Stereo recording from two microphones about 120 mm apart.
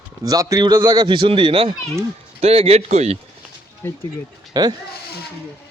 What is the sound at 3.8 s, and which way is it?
Speech, 15° left (ahead or behind).